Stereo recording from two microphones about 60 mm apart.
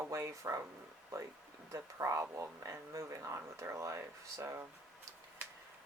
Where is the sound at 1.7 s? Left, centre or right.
Right.